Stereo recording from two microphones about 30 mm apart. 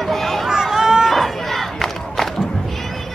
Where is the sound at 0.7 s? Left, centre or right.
Centre.